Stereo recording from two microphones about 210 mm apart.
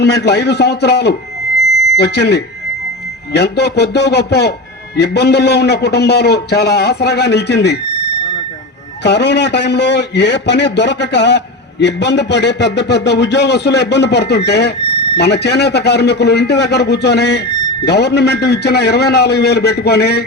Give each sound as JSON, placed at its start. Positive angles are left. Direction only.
{"t": 0.0, "sound": "speech", "side_deg": 50}
{"t": 9.0, "sound": "a man's voice", "side_deg": 55}